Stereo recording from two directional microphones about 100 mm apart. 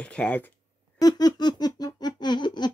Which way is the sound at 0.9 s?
40° left (ahead or behind).